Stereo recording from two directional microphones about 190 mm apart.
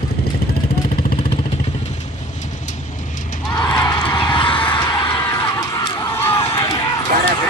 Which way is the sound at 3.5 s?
25° left (ahead or behind).